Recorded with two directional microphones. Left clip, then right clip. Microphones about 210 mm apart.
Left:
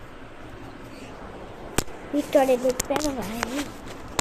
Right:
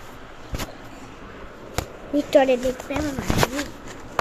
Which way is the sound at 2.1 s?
15° right (ahead or behind).